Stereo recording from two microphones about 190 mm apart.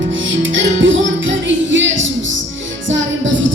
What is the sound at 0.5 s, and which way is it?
Music, 80° right.